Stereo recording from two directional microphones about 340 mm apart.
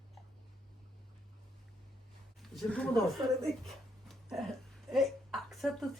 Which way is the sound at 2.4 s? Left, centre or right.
Centre.